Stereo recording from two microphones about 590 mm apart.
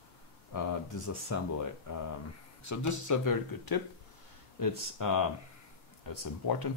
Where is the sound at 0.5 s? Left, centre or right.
Left.